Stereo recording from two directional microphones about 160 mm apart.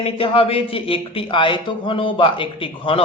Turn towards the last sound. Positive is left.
turn(degrees=35)  # may be behind; listen again after turning